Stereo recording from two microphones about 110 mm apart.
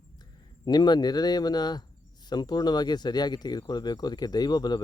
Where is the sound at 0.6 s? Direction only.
40° left (ahead or behind).